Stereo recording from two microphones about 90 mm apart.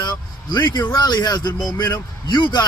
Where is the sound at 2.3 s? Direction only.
60° left (ahead or behind).